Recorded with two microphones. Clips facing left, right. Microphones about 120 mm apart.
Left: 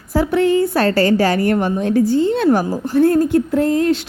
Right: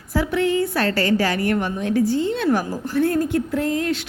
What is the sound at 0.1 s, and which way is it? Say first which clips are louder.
A woman's voice: left 5 dB; 35° left (ahead or behind).